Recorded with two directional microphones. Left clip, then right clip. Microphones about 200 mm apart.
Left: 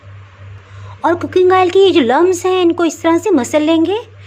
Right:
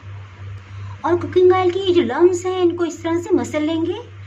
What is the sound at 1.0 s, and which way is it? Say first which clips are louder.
A woman's voice: left 3 dB; 45° left (ahead or behind).